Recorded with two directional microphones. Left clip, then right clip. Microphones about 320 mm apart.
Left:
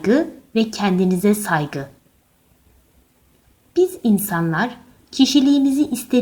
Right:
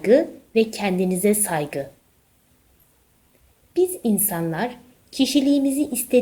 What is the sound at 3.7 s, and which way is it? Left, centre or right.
Speech, left.